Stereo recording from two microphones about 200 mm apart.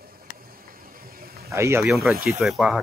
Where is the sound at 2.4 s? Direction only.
Centre (ahead or behind).